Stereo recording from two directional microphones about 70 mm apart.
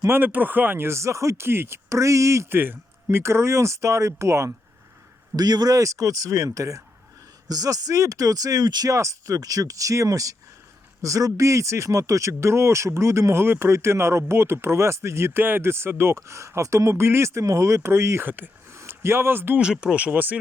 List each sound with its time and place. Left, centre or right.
0.1 s speech: right
5.4 s speech: right
7.4 s speech: right
8.9 s speech: right
18.3 s speech: right
18.7 s a sound: right
19.5 s speech: centre